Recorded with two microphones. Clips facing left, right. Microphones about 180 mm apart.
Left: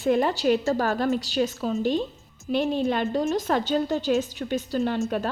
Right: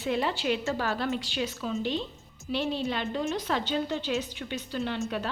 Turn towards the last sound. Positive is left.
turn(degrees=45)  # may be behind; listen again after turning